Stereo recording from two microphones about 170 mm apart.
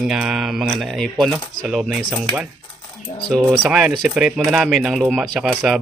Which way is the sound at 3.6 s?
5° right (ahead or behind).